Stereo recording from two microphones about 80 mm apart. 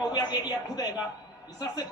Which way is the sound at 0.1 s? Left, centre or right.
Left.